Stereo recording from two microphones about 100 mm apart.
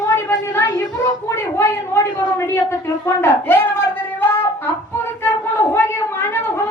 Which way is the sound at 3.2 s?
25° left (ahead or behind).